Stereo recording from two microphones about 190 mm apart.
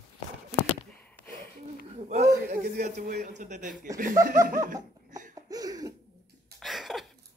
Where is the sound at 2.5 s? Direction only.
55° right (ahead or behind).